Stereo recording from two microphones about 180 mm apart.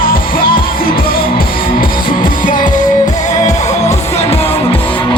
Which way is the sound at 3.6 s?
35° left (ahead or behind).